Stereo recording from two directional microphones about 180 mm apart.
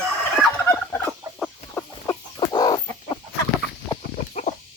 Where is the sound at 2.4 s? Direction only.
25° left (ahead or behind).